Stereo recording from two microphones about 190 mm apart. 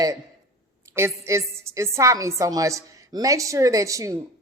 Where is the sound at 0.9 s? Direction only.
15° right (ahead or behind).